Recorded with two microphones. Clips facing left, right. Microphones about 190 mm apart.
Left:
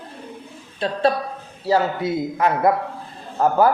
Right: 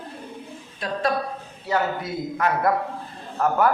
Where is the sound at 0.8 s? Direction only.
30° left (ahead or behind).